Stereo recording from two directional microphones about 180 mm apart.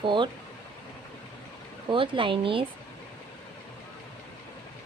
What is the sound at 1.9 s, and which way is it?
Speech, 30° right (ahead or behind).